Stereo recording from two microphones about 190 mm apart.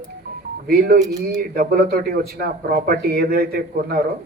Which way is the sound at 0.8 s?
55° right (ahead or behind).